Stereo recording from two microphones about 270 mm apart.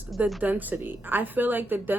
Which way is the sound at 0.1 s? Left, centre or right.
Centre.